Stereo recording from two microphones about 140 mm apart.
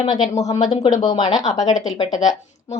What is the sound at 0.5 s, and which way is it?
Speech, 50° left (ahead or behind).